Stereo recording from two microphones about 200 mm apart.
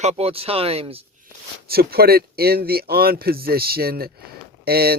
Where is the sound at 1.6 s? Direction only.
50° right (ahead or behind).